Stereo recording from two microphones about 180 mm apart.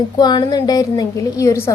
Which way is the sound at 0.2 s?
20° left (ahead or behind).